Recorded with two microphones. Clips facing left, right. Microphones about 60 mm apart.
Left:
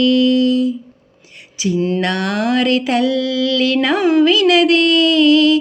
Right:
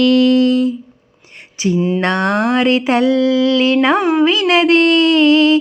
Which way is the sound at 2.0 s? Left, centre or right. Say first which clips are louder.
Right 3 dB; right.